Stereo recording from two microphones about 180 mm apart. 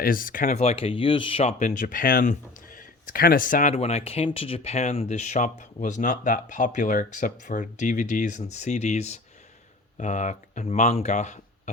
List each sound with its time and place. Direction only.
0.0 s speech: 50° left (ahead or behind)